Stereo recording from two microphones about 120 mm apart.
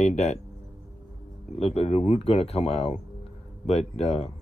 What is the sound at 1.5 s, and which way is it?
Speech, 60° left (ahead or behind).